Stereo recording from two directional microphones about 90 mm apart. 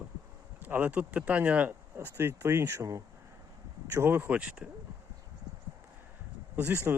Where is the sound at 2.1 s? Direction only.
25° right (ahead or behind).